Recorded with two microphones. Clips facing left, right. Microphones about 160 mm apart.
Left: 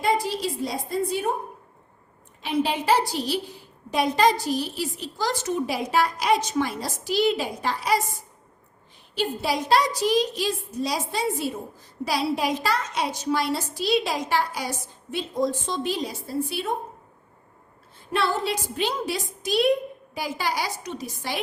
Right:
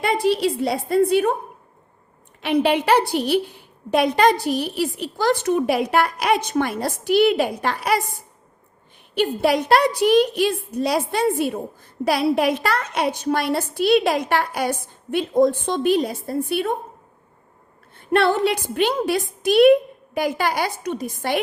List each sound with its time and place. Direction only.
0.0 s a woman's voice: 65° right (ahead or behind)
2.4 s a woman's voice: 65° right (ahead or behind)
9.1 s a woman's voice: 60° right (ahead or behind)
17.9 s a woman's voice: 60° right (ahead or behind)